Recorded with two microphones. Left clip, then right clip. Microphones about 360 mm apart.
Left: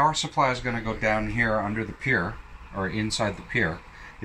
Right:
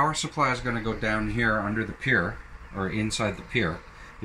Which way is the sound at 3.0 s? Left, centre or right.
Left.